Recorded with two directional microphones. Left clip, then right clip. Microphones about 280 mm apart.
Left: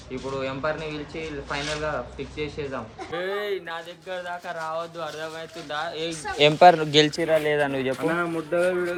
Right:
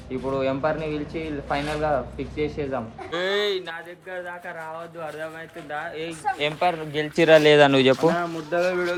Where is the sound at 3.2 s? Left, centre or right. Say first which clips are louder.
Right 4 dB; right.